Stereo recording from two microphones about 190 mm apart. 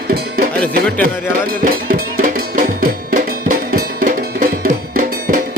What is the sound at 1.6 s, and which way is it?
Music, 45° right (ahead or behind).